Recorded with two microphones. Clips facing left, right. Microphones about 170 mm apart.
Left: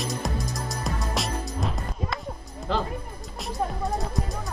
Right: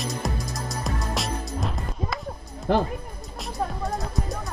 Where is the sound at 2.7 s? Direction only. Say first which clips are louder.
Right 5 dB; 55° right (ahead or behind).